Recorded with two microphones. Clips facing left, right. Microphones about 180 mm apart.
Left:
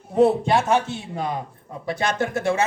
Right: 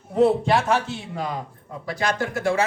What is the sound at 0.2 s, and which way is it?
A man's voice, 20° left (ahead or behind).